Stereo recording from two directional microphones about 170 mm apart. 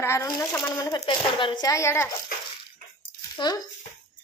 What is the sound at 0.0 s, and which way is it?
A woman's voice, 15° left (ahead or behind).